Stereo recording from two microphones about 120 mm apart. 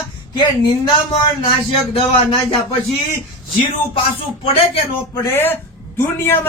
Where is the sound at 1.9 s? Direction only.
50° left (ahead or behind).